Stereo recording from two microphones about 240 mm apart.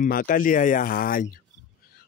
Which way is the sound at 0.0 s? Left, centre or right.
Left.